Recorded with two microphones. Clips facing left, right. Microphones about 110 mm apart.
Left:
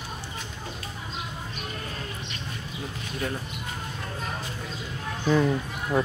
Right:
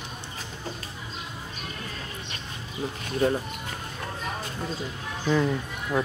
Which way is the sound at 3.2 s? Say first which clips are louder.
Right 8 dB; 30° right (ahead or behind).